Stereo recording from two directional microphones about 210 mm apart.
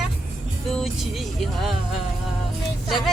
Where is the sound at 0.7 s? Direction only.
Centre (ahead or behind).